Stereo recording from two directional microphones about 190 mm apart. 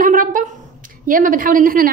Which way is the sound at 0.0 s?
45° right (ahead or behind).